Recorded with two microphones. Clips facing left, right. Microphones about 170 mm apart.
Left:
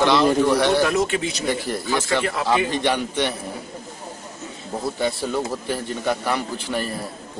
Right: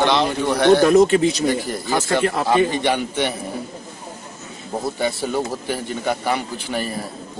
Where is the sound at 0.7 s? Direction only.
55° right (ahead or behind).